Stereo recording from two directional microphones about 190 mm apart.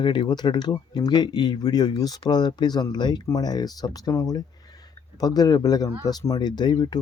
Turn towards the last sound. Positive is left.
turn(degrees=20)  # may be behind; listen again after turning